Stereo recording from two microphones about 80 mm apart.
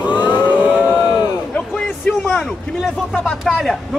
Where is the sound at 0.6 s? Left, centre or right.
Centre.